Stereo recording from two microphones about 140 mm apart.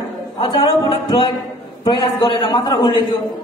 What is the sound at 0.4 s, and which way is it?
A woman's voice, 40° left (ahead or behind).